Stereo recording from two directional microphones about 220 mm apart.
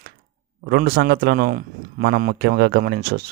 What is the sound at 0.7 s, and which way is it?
Speech, 45° right (ahead or behind).